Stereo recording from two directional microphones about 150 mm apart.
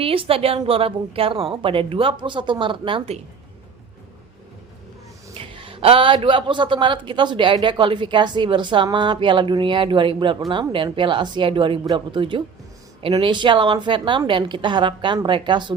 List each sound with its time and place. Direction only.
0.0 s a man's voice: 40° right (ahead or behind)
5.3 s a man's voice: 35° right (ahead or behind)